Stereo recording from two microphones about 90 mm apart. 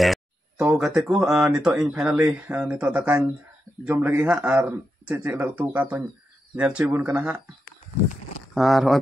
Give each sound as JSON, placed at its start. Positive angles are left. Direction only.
{"t": 0.0, "sound": "a sound", "side_deg": 0}
{"t": 0.7, "sound": "speech", "side_deg": -10}
{"t": 2.2, "sound": "speech", "side_deg": -20}
{"t": 8.5, "sound": "speech", "side_deg": 0}